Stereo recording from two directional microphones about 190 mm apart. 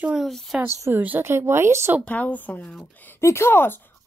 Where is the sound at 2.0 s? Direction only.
10° left (ahead or behind).